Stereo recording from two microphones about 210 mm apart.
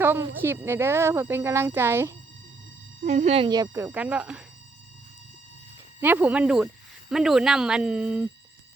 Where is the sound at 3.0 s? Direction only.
35° right (ahead or behind); by 4.4 s 5° right (ahead or behind).